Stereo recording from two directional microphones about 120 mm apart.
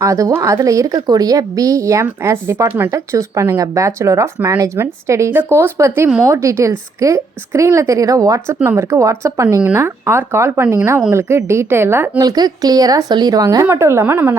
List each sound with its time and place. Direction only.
0.0 s a woman's voice: 25° right (ahead or behind)
12.2 s a woman's voice: 35° right (ahead or behind)